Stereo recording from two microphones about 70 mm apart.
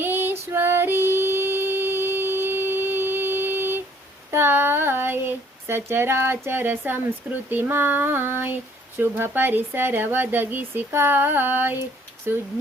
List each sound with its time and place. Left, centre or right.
0.0 s female singing: right
4.3 s a sound: right
7.5 s child singing: right
9.0 s speech: right
12.3 s child singing: right